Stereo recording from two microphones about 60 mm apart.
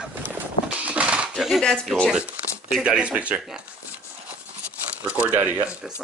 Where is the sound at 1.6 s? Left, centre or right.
Centre.